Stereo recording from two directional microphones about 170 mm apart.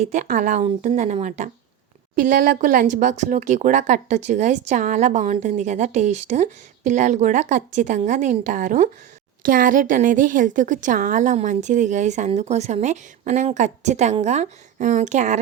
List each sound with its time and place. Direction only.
0.0 s speech: 50° right (ahead or behind)